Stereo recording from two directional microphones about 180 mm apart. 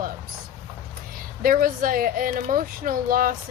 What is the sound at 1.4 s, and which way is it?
A woman's voice, 50° right (ahead or behind).